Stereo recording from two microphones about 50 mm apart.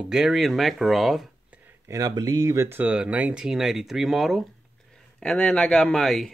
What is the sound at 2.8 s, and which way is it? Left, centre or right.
Speech, right.